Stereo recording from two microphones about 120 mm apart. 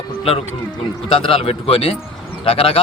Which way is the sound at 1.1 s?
50° left (ahead or behind).